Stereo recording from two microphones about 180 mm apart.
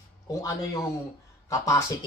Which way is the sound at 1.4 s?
15° left (ahead or behind).